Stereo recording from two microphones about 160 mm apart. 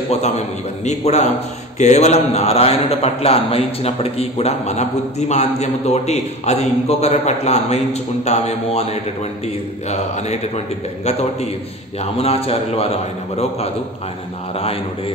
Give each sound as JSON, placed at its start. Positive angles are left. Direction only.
{"t": 0.8, "sound": "a man's voice", "side_deg": 45}
{"t": 9.8, "sound": "a man's voice", "side_deg": 45}
{"t": 12.0, "sound": "a man's voice", "side_deg": 40}